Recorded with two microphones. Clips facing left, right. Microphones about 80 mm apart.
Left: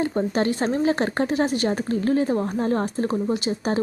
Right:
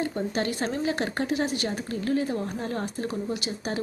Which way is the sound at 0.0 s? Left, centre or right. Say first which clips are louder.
Left 6 dB; left.